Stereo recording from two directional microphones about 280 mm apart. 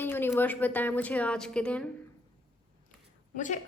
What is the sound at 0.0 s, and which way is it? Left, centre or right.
A woman's voice, centre.